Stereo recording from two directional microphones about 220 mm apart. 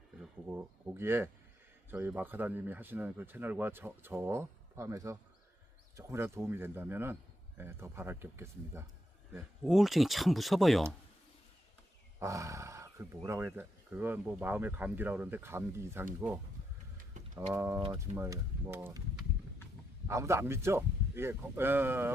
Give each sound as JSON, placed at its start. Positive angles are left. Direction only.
{"t": 0.2, "sound": "a man's voice", "side_deg": -10}
{"t": 12.2, "sound": "wild animals", "side_deg": -15}
{"t": 13.2, "sound": "a man's voice", "side_deg": -10}
{"t": 17.0, "sound": "a sound", "side_deg": -35}
{"t": 17.5, "sound": "a man's voice", "side_deg": -10}